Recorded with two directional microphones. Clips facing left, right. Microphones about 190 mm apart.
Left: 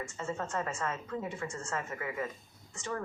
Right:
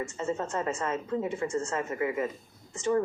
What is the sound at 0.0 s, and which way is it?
Speech, 25° right (ahead or behind).